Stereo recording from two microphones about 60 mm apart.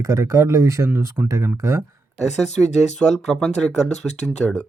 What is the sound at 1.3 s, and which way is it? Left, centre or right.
Speech, right.